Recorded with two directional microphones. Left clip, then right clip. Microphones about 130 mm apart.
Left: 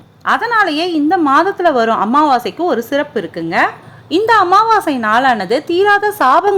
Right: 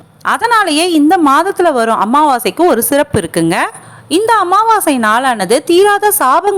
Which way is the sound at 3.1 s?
45° right (ahead or behind).